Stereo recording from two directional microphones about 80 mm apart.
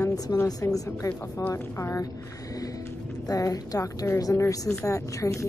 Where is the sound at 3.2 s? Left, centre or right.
Left.